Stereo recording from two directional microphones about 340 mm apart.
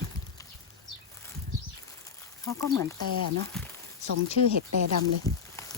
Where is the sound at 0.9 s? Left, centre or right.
Left.